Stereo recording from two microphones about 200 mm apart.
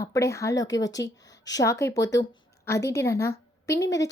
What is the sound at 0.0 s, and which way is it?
A woman's voice, 15° left (ahead or behind).